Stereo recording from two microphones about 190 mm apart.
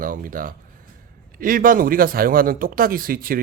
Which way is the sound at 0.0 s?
45° right (ahead or behind).